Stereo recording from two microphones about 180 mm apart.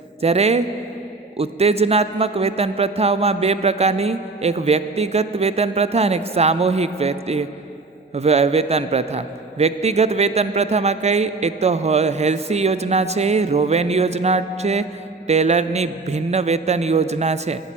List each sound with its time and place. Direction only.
0.2 s a man's voice: 35° right (ahead or behind)